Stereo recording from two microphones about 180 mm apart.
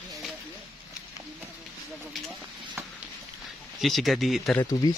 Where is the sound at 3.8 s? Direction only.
Centre (ahead or behind).